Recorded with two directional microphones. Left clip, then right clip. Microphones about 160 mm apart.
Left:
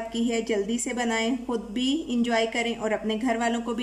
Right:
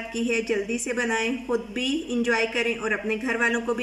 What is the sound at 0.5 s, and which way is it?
Speech, 15° left (ahead or behind).